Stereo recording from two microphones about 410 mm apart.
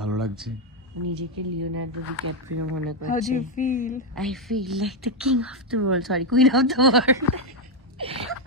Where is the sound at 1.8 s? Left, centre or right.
Right.